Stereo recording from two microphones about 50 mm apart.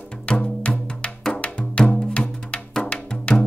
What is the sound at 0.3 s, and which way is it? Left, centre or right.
Music, left.